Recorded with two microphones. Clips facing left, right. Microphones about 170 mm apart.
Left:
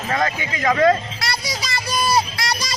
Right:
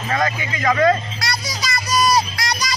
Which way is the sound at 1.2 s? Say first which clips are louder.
Even; 30° left (ahead or behind).